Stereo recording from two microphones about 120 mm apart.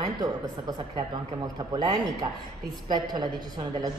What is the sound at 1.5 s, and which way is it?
A woman's voice, 35° right (ahead or behind).